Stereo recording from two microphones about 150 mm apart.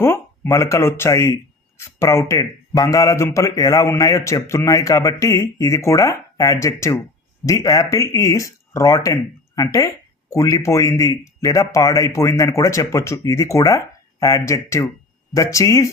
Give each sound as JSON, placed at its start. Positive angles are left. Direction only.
{"t": 0.0, "sound": "speech", "side_deg": 15}